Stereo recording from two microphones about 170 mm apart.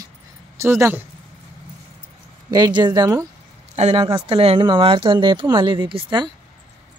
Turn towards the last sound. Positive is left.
turn(degrees=-25)  # may be behind; listen again after turning